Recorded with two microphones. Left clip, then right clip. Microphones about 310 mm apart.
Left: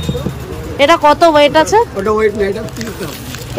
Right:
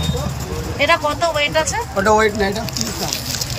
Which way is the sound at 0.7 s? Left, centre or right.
Centre.